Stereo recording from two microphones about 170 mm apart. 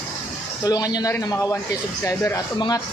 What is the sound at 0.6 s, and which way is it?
Speech, 25° left (ahead or behind).